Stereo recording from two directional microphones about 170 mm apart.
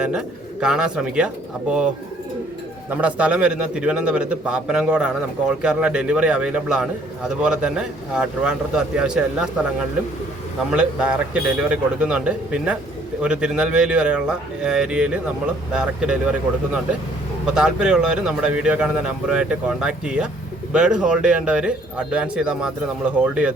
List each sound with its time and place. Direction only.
0.0 s speech: 5° right (ahead or behind)
2.9 s speech: 10° right (ahead or behind)
10.7 s speech: 5° right (ahead or behind)
17.4 s speech: 5° right (ahead or behind)